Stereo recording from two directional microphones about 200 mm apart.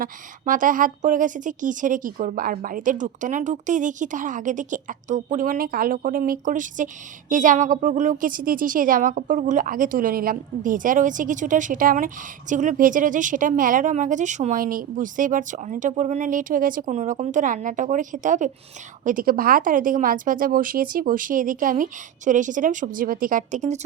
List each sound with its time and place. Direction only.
0.0 s a woman's voice: 40° right (ahead or behind)